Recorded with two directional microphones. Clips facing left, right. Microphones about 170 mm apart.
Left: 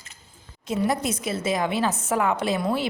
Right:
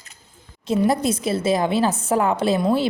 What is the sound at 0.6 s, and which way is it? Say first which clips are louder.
A woman's voice: right 5 dB; 30° right (ahead or behind).